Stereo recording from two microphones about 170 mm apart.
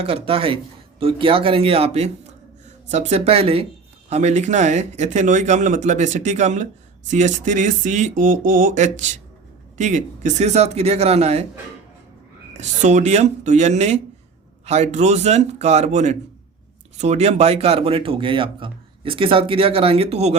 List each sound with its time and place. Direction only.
0.0 s speech: 35° right (ahead or behind)
12.5 s speech: 45° right (ahead or behind)